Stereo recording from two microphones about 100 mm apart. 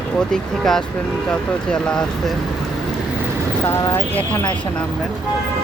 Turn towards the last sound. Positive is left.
turn(degrees=20)  # may be behind; listen again after turning